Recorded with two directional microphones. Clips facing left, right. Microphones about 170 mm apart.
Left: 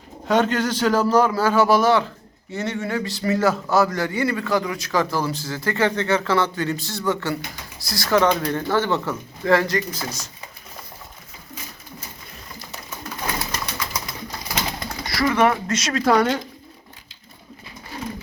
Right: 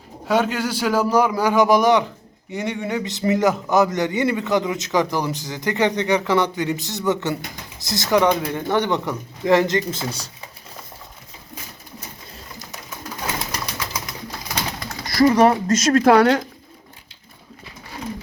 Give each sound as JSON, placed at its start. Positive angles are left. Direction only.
{"t": 0.3, "sound": "a man's voice", "side_deg": -10}
{"t": 15.1, "sound": "speech", "side_deg": -35}